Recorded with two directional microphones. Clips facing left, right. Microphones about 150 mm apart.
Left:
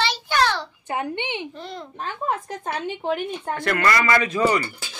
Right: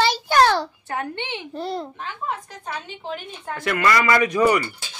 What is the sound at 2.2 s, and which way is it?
A woman's voice, 50° left (ahead or behind).